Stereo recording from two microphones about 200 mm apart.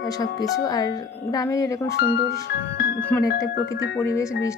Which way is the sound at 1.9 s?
55° left (ahead or behind).